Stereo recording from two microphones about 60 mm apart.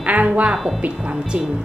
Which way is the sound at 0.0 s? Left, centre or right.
Right.